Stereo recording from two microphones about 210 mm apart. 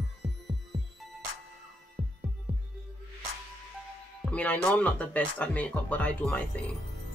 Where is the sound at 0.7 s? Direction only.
25° right (ahead or behind).